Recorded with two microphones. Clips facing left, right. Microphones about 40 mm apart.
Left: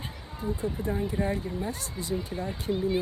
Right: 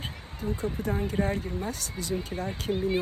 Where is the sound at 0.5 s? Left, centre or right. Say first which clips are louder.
Even; right.